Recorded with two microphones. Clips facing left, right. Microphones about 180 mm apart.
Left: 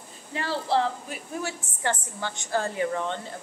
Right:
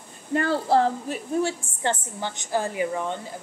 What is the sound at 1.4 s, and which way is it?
A woman's voice, 20° right (ahead or behind).